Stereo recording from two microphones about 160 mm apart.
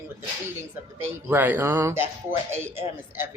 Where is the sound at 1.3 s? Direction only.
10° right (ahead or behind).